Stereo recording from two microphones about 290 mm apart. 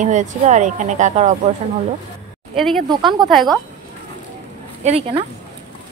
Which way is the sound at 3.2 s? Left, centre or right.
Centre.